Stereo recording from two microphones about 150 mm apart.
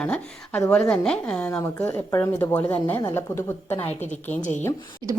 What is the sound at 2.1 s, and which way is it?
A woman's voice, 15° left (ahead or behind).